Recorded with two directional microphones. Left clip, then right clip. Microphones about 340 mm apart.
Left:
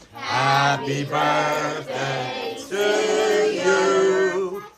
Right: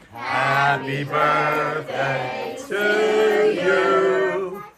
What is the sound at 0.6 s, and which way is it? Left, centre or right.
Chant, left.